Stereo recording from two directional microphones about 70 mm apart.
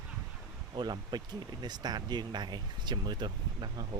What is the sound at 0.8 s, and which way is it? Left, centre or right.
Speech, right.